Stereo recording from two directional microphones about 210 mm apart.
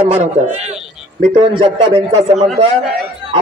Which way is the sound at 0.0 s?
30° right (ahead or behind).